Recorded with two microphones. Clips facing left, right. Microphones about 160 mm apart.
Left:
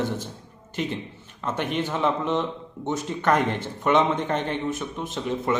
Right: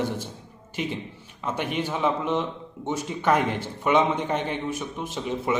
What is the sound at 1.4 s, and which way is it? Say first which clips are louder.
A man's voice: left 1 dB; 10° right (ahead or behind).